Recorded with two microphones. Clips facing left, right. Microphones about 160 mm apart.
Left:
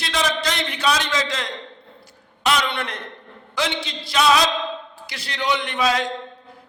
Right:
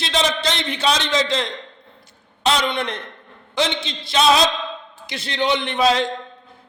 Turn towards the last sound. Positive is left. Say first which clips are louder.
# right 3 dB
turn(degrees=-30)  # may be behind; listen again after turning